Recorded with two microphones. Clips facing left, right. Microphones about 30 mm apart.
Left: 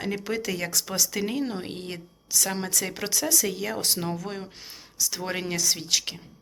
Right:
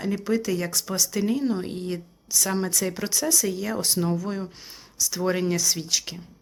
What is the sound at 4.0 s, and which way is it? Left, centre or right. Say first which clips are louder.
Speech: right 5 dB; centre.